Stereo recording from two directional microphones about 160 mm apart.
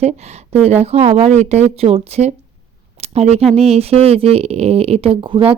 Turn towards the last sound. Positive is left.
turn(degrees=-35)  # may be behind; listen again after turning